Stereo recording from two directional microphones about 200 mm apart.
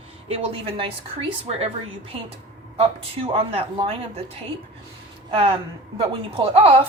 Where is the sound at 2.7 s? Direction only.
30° right (ahead or behind).